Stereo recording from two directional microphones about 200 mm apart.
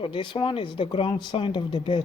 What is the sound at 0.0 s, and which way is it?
Speech, 25° left (ahead or behind).